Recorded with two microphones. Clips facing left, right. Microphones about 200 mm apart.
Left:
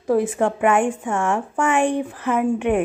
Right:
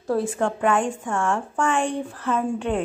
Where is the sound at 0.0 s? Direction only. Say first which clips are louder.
Left 4 dB; 20° left (ahead or behind).